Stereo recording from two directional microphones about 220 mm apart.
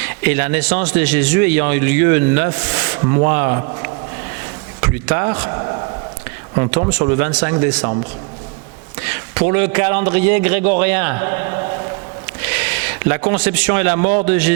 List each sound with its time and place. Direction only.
0.0 s a man's voice: 15° right (ahead or behind)
6.6 s a man's voice: 20° right (ahead or behind)
9.0 s a man's voice: 15° right (ahead or behind)